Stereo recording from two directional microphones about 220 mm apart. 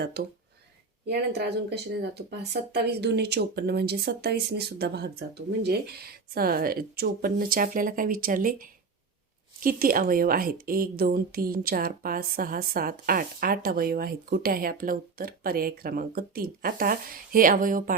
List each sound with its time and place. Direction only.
0.0 s speech: 45° right (ahead or behind)